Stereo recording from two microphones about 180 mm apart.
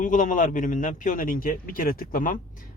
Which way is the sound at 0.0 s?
45° left (ahead or behind).